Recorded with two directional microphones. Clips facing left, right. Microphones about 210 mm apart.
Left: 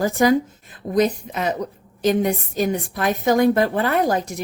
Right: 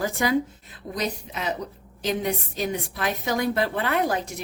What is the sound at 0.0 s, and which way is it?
A woman's voice, 40° left (ahead or behind).